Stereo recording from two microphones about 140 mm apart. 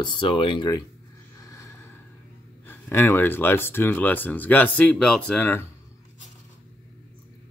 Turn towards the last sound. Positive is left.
turn(degrees=15)  # may be behind; listen again after turning